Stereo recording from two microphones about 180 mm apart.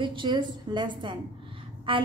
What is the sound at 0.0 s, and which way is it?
A woman's voice, 25° right (ahead or behind).